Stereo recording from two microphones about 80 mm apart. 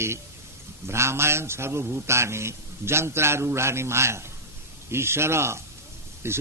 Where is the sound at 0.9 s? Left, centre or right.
Right.